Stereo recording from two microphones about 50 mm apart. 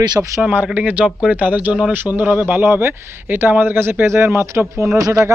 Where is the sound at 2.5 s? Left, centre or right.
Right.